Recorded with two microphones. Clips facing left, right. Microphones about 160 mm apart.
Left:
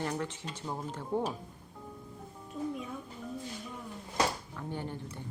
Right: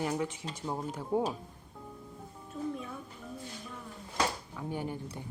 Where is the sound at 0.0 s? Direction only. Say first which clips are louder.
Right 2 dB; 10° right (ahead or behind).